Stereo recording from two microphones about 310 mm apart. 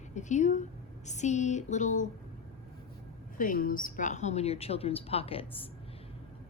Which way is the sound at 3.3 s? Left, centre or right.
Left.